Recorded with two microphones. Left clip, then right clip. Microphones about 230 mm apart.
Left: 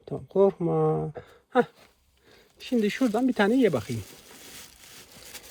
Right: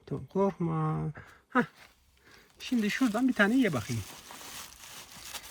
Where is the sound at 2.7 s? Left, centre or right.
Centre.